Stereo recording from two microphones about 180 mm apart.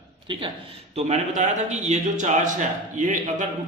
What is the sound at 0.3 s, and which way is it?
Speech, 25° right (ahead or behind).